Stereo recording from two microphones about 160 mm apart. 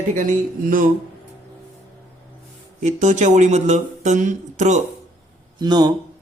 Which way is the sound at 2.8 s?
50° right (ahead or behind).